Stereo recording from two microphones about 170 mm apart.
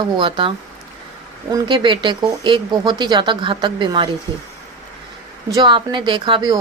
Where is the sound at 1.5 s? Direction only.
25° right (ahead or behind).